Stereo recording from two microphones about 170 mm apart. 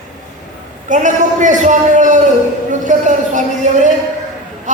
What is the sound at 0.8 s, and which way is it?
A man's voice, 45° right (ahead or behind).